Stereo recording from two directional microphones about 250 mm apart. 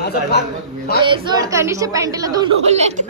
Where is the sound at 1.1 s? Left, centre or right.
Centre.